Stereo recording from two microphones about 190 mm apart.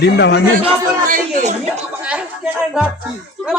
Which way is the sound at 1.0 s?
40° right (ahead or behind).